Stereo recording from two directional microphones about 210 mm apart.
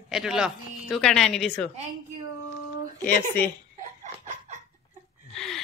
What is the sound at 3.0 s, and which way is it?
Speech, 10° left (ahead or behind).